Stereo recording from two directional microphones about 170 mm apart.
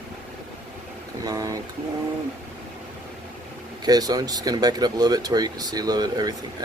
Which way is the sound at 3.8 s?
25° right (ahead or behind).